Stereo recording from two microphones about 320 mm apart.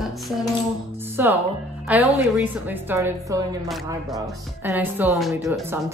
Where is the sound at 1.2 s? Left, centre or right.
Centre.